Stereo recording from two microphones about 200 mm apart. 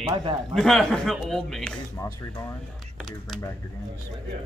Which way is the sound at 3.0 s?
Centre (ahead or behind).